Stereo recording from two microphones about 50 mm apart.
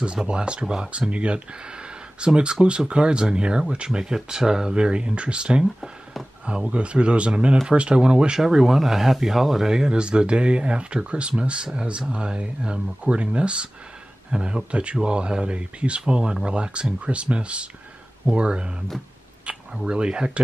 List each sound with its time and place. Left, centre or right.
0.0 s speech: centre
19.7 s speech: centre